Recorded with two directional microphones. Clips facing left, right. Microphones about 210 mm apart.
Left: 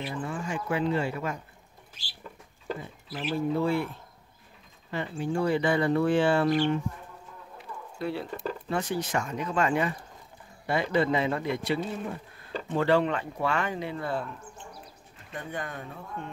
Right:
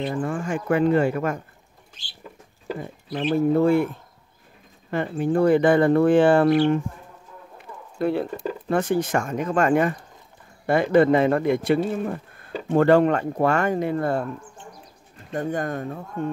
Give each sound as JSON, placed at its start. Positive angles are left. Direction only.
{"t": 0.1, "sound": "speech", "side_deg": -50}
{"t": 3.3, "sound": "speech", "side_deg": -50}
{"t": 4.9, "sound": "speech", "side_deg": -55}
{"t": 8.0, "sound": "speech", "side_deg": -55}
{"t": 15.3, "sound": "speech", "side_deg": -45}